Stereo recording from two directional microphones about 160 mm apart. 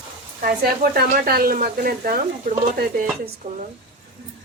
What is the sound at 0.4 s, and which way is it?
Speech, 75° right (ahead or behind).